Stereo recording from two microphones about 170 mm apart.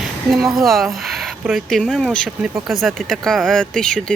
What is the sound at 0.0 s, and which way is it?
Speech, centre (ahead or behind).